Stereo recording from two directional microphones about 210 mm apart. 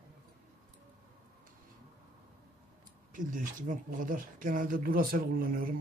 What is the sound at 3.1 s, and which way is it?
Speech, 40° right (ahead or behind).